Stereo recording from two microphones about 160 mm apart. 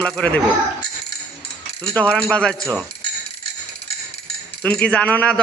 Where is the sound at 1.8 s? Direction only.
5° left (ahead or behind).